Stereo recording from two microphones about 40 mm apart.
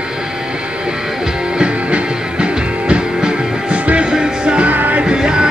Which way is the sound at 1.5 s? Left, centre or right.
Right.